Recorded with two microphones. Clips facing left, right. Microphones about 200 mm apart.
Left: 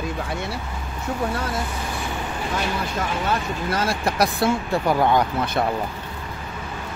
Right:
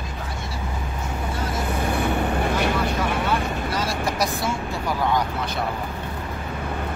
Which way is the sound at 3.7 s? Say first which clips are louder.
Left 6 dB; 55° left (ahead or behind).